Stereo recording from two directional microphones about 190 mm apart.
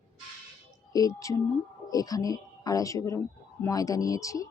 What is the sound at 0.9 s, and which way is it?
A woman's voice, 20° left (ahead or behind).